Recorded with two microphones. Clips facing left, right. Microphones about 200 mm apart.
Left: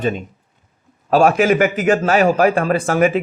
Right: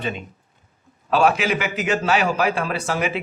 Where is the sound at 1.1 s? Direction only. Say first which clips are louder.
Left 6 dB; 45° left (ahead or behind).